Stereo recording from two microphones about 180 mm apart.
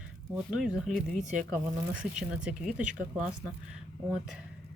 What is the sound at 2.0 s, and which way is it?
Speech, 5° right (ahead or behind).